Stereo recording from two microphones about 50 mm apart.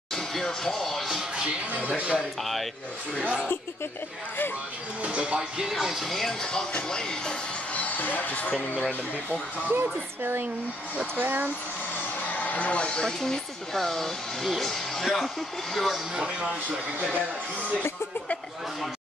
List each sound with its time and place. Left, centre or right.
0.1 s music: centre
1.7 s speech: right
5.0 s speech: right
5.6 s speech: centre
6.0 s speech: centre
6.4 s speech: centre
7.7 s speech: left
9.3 s speech: right
11.1 s speech: right
12.3 s speech: left
13.2 s speech: centre
16.2 s speech: right